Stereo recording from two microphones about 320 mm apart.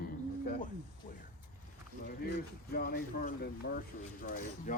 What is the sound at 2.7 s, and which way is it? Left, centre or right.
Speech, left.